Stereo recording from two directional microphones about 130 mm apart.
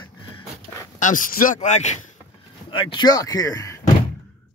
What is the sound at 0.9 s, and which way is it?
Speech, 80° left.